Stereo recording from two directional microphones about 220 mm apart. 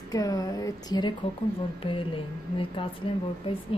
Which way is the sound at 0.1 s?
15° left (ahead or behind).